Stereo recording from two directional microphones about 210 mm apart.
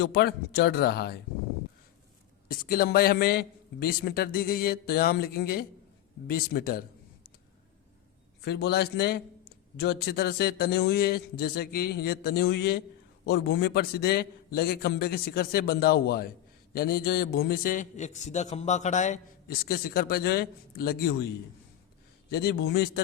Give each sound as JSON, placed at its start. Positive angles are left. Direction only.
{"t": 0.0, "sound": "a man's voice", "side_deg": 50}
{"t": 2.5, "sound": "a man's voice", "side_deg": 45}
{"t": 8.4, "sound": "a man's voice", "side_deg": 50}
{"t": 22.3, "sound": "a man's voice", "side_deg": 50}